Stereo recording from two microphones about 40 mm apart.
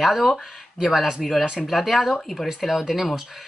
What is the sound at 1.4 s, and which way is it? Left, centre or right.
Speech, centre.